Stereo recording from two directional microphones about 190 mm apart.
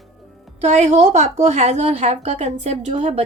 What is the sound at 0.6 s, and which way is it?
A woman's voice, 35° right (ahead or behind).